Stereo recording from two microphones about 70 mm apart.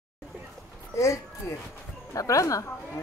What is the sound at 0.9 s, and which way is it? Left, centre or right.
A man's voice, left.